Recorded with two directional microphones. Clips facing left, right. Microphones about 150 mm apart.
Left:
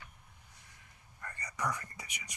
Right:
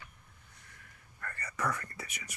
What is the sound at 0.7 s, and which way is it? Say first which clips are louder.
Whispering: right 4 dB; 20° left (ahead or behind).